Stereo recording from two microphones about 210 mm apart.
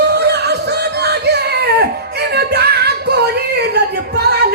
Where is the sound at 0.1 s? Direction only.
50° right (ahead or behind).